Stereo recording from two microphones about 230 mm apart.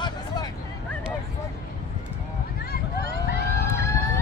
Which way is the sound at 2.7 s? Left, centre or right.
Left.